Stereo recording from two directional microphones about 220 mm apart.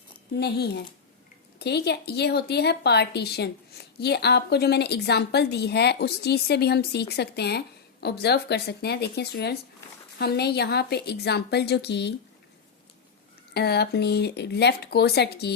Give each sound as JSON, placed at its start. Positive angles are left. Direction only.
{"t": 0.3, "sound": "speech", "side_deg": 50}
{"t": 13.5, "sound": "speech", "side_deg": 45}